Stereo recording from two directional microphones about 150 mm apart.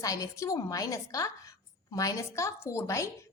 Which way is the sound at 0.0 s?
20° left (ahead or behind).